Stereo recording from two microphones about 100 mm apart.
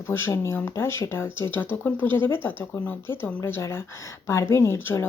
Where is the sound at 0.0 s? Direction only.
25° left (ahead or behind).